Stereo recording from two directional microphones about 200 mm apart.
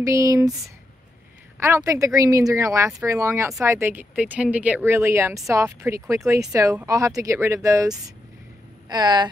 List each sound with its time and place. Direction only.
0.0 s speech: 15° right (ahead or behind)
1.6 s speech: 15° right (ahead or behind)